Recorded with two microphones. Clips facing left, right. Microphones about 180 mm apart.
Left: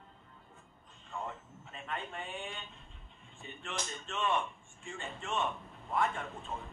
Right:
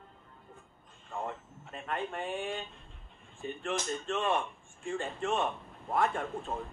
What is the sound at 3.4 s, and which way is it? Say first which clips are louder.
Speech: right 8 dB; 50° right (ahead or behind).